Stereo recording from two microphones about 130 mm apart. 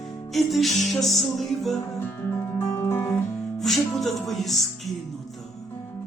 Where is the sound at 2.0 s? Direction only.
15° left (ahead or behind).